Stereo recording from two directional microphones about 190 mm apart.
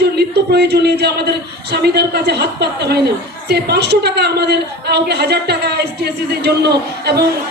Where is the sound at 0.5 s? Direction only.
60° right (ahead or behind).